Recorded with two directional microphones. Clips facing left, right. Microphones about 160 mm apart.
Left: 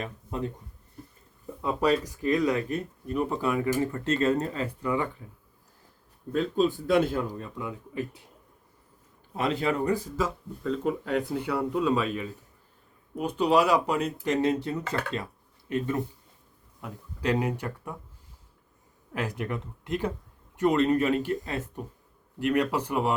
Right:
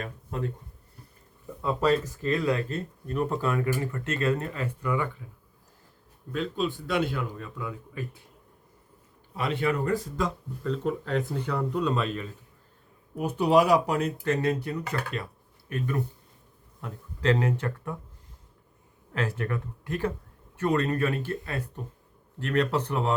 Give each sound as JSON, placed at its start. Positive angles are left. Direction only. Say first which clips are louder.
{"t": 0.0, "sound": "speech", "louder": "even", "side_deg": 20}
{"t": 1.6, "sound": "speech", "louder": "even", "side_deg": 15}
{"t": 6.3, "sound": "speech", "louder": "left 4 dB", "side_deg": 45}
{"t": 7.6, "sound": "speech", "louder": "left 3 dB", "side_deg": 20}
{"t": 9.3, "sound": "speech", "louder": "left 2 dB", "side_deg": 40}
{"t": 9.9, "sound": "speech", "louder": "even", "side_deg": 5}
{"t": 13.1, "sound": "speech", "louder": "right 1 dB", "side_deg": -10}
{"t": 14.3, "sound": "speech", "louder": "left 3 dB", "side_deg": 25}
{"t": 16.8, "sound": "speech", "louder": "right 3 dB", "side_deg": 10}
{"t": 19.1, "sound": "speech", "louder": "right 1 dB", "side_deg": 15}